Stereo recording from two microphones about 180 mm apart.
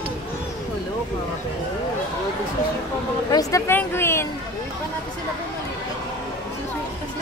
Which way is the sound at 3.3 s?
20° left (ahead or behind).